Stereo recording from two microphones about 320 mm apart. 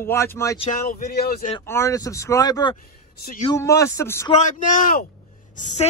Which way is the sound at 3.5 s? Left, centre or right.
Centre.